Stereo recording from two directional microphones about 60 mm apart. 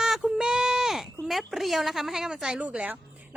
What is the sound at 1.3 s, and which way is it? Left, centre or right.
A woman's voice, centre.